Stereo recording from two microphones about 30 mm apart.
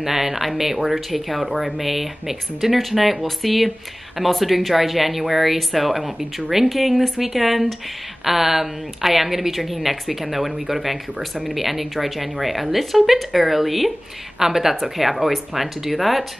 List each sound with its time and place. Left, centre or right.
0.0 s a woman's voice: centre